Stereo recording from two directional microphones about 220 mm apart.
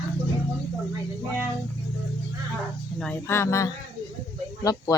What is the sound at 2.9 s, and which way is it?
Speech, 10° left (ahead or behind).